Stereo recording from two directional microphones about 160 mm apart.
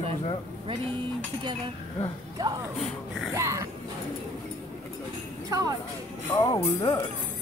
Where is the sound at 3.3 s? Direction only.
20° right (ahead or behind).